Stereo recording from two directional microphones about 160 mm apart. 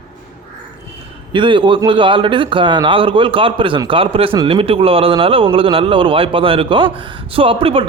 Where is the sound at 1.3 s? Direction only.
30° right (ahead or behind).